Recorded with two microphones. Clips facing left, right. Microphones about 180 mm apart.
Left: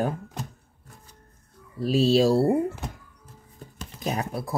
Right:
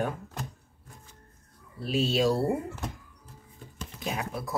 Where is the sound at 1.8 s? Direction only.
35° left (ahead or behind).